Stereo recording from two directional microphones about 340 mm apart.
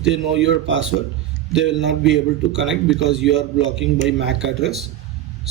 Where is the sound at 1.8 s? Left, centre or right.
Right.